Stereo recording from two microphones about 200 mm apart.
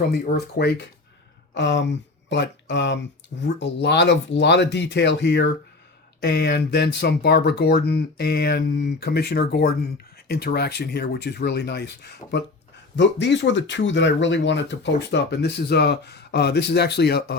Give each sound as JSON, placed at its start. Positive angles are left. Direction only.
{"t": 0.1, "sound": "speech", "side_deg": 55}